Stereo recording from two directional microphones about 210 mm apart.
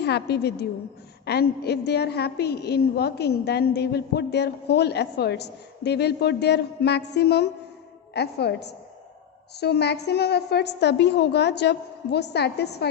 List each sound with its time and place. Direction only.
0.0 s a woman's voice: 50° left (ahead or behind)